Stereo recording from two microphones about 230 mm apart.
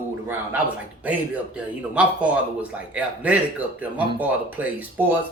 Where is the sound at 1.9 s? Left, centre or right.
Centre.